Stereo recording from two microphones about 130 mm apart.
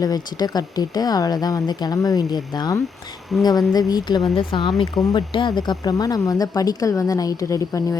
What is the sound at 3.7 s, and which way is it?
Speech, 30° left (ahead or behind).